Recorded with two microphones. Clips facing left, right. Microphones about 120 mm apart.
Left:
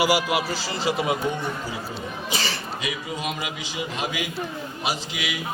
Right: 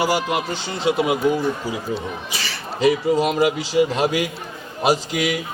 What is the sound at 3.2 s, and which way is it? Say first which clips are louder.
Speech: right 9 dB; 50° right (ahead or behind).